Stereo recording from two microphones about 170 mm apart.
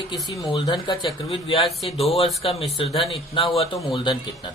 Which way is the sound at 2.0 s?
35° left (ahead or behind).